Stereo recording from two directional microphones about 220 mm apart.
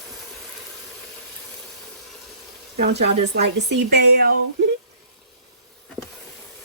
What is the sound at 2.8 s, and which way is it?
Speech, 50° right (ahead or behind).